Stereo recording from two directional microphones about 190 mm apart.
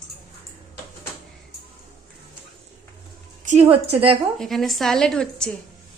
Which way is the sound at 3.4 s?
35° right (ahead or behind).